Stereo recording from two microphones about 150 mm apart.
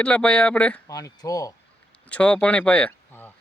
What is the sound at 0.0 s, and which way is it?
Speech, 10° left (ahead or behind).